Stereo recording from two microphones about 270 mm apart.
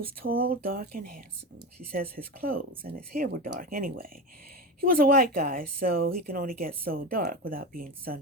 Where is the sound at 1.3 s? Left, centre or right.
Right.